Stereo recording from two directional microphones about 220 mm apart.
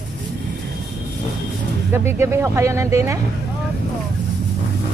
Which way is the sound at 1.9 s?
10° right (ahead or behind).